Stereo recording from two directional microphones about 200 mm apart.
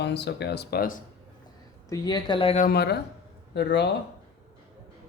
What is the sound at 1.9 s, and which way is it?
Speech, 20° left (ahead or behind).